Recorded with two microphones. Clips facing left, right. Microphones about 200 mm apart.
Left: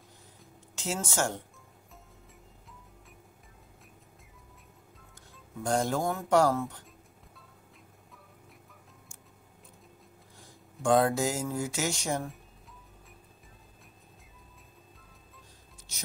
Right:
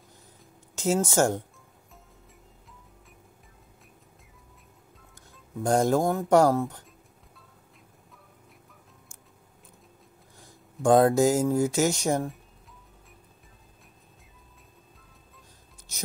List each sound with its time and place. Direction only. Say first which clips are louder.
0.7 s speech: right 9 dB; 40° right (ahead or behind)
5.6 s speech: right 6 dB; 45° right (ahead or behind)
10.8 s speech: right 6 dB; 40° right (ahead or behind)